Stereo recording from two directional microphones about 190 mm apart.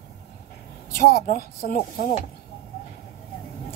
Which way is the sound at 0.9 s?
50° left (ahead or behind).